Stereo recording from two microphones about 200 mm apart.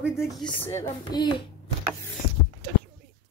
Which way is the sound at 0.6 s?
15° left (ahead or behind).